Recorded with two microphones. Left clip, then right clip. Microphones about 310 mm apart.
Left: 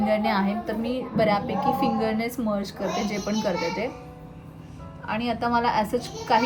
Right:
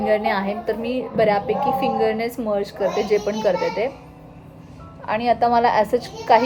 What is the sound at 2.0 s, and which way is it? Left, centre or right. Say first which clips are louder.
Speech: right 6 dB; right.